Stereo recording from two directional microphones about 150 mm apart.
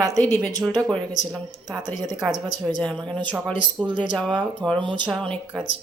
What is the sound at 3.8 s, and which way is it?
Speech, 30° right (ahead or behind).